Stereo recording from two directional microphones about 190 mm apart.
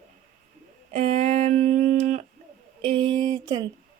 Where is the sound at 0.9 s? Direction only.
35° right (ahead or behind).